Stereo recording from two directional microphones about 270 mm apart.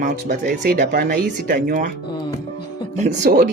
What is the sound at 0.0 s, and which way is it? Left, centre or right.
Speech, right.